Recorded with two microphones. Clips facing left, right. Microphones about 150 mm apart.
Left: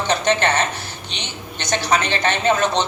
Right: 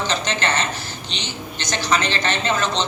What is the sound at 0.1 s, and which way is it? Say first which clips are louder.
A man's voice: left 5 dB; 60° left (ahead or behind).